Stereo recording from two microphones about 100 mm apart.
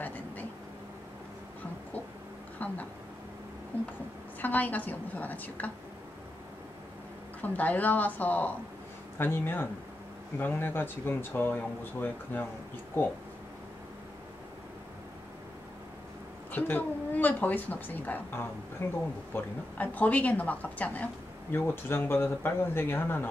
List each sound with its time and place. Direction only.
0.0 s vehicle: 15° left (ahead or behind)
2.6 s a sound: 15° left (ahead or behind)
4.4 s speech: 15° left (ahead or behind)
7.4 s speech: 15° left (ahead or behind)
16.5 s speech: 20° left (ahead or behind)